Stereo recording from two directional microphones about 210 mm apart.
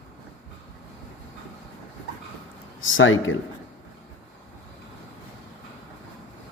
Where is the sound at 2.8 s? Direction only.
70° left (ahead or behind).